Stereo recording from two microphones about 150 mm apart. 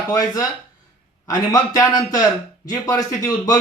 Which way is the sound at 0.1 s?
25° left (ahead or behind).